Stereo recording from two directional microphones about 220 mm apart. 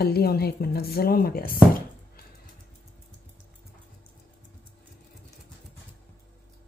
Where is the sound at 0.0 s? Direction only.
45° left (ahead or behind).